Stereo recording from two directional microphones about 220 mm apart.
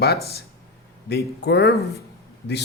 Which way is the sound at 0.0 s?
45° left (ahead or behind).